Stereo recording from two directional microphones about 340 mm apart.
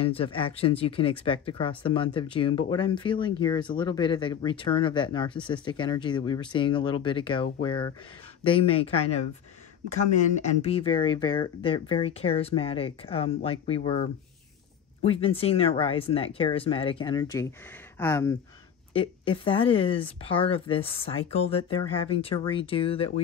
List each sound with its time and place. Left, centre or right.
0.0 s speech: centre
10.6 s speech: centre